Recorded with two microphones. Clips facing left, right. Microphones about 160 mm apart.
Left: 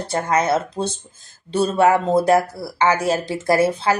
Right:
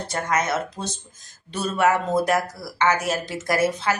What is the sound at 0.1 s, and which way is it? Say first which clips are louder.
Speech: left 5 dB; 30° left (ahead or behind).